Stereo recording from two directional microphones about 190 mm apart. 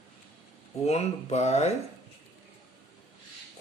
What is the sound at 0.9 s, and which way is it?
Speech, 35° left (ahead or behind).